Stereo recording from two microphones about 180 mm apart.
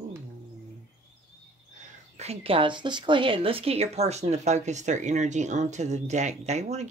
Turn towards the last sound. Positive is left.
turn(degrees=-40)  # may be behind; listen again after turning